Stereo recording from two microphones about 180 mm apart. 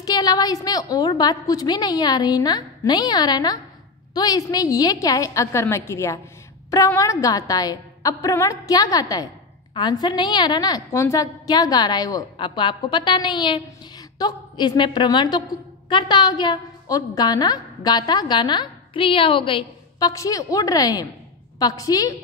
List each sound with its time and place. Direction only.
0.0 s a woman's voice: 20° left (ahead or behind)